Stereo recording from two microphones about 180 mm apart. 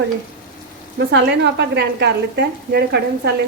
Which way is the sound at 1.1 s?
70° right (ahead or behind).